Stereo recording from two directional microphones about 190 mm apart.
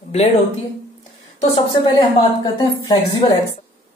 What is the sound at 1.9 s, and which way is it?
A woman's voice, 20° left (ahead or behind).